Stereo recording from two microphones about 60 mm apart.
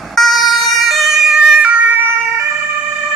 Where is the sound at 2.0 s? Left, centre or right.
Right.